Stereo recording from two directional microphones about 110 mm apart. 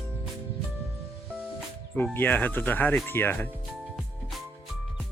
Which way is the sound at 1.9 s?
20° left (ahead or behind).